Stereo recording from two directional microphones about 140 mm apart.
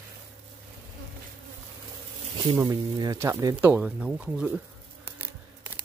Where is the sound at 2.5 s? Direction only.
30° right (ahead or behind).